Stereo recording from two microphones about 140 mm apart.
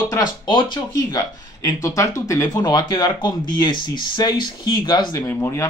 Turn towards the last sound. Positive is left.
turn(degrees=20)  # may be behind; listen again after turning